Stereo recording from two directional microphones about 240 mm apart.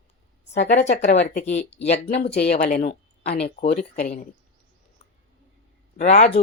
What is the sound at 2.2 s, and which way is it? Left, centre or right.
Speech, left.